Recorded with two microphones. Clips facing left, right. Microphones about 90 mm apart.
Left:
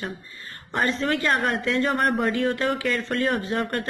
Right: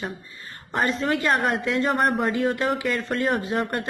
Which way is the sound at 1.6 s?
20° right (ahead or behind).